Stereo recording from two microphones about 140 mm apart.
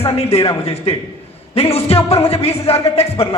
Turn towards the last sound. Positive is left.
turn(degrees=45)  # may be behind; listen again after turning